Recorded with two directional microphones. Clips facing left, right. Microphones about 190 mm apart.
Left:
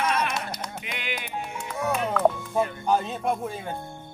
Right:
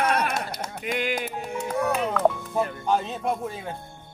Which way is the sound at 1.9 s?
Centre (ahead or behind).